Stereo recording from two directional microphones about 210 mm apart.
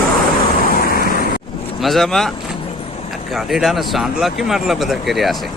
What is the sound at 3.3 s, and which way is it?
Speech, centre (ahead or behind).